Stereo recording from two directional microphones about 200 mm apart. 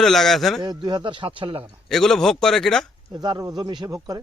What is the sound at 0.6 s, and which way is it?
Speech, 20° right (ahead or behind).